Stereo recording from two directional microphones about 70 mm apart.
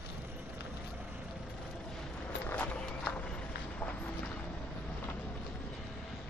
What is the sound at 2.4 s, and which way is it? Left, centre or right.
Horse, left.